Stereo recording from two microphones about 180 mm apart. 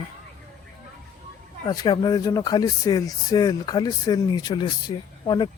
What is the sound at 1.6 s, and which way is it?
Speech, 25° left (ahead or behind).